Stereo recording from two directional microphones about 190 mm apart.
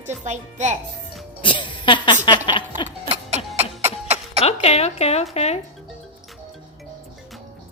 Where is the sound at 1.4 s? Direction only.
25° left (ahead or behind).